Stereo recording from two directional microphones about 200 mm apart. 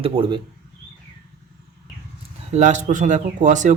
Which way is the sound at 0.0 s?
25° right (ahead or behind).